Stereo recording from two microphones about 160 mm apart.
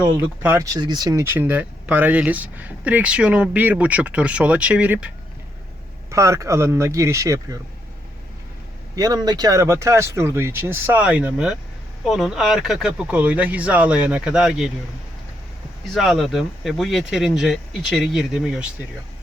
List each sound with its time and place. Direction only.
0.0 s speech: 15° right (ahead or behind)
6.1 s speech: 20° right (ahead or behind)
9.0 s speech: 25° right (ahead or behind); by 14.7 s centre (ahead or behind)
15.9 s speech: centre (ahead or behind)